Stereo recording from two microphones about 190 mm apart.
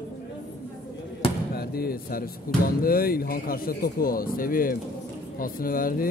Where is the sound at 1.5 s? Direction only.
55° left (ahead or behind).